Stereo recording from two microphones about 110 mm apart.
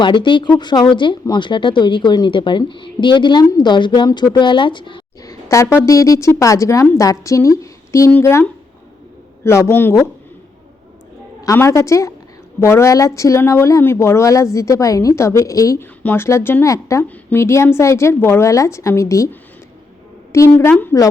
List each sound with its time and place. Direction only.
0.0 s speech: 45° left (ahead or behind)
5.2 s a woman's voice: 30° left (ahead or behind)
11.4 s a woman's voice: 25° left (ahead or behind)
15.8 s a woman's voice: 20° left (ahead or behind)
20.3 s a woman's voice: 25° left (ahead or behind)